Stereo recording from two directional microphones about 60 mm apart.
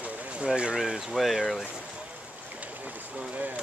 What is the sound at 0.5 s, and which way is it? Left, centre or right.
Speech, centre.